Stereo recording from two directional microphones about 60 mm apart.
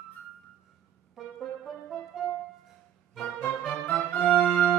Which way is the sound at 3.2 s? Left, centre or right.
Centre.